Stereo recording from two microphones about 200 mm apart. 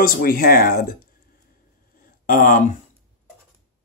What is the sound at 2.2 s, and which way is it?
Speech, 40° left (ahead or behind).